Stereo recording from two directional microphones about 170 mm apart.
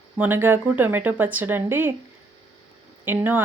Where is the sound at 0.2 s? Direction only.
10° right (ahead or behind).